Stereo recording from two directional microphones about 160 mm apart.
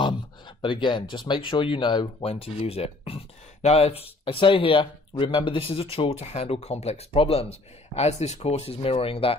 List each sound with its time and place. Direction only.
0.0 s speech: 30° left (ahead or behind)